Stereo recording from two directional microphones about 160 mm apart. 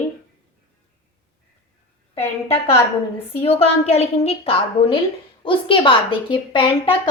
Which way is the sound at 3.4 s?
35° left (ahead or behind).